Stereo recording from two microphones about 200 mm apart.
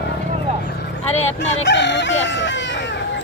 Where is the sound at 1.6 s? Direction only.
60° left (ahead or behind).